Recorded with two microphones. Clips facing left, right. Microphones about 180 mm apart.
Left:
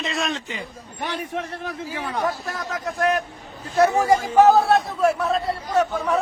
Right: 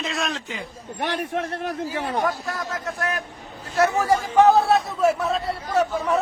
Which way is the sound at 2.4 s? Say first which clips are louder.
Even; 20° left (ahead or behind).